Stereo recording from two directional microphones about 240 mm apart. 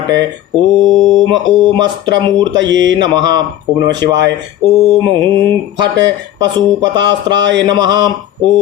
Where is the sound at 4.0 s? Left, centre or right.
Right.